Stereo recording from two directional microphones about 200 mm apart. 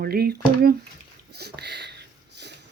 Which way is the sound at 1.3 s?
55° right (ahead or behind).